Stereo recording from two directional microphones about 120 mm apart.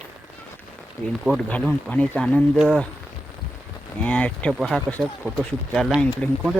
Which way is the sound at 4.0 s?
10° left (ahead or behind).